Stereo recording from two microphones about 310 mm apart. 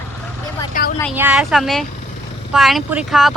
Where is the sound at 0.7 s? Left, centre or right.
Left.